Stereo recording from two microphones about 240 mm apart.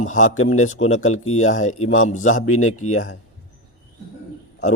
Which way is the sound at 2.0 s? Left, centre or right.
Left.